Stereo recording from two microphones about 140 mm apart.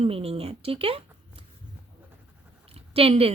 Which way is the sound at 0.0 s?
45° right (ahead or behind).